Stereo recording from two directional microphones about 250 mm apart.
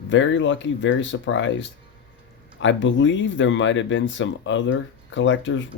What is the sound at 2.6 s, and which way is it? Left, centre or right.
Speech, left.